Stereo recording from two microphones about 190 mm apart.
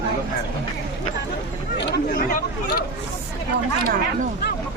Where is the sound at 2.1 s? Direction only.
50° left (ahead or behind).